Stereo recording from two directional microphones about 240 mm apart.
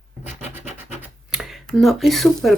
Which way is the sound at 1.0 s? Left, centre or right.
Centre.